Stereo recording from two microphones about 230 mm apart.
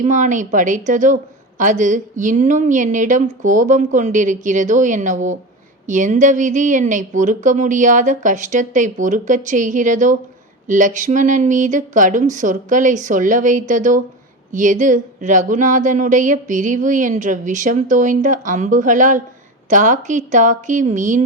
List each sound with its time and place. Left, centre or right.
0.0 s a woman's voice: right